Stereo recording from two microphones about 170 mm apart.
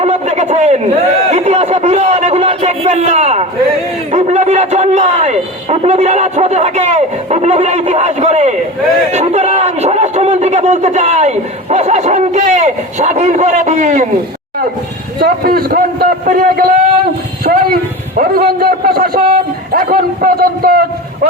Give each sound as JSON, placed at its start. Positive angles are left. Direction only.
{"t": 0.0, "sound": "a sound", "side_deg": -40}
{"t": 1.3, "sound": "speech", "side_deg": -40}
{"t": 15.2, "sound": "a man's voice", "side_deg": -60}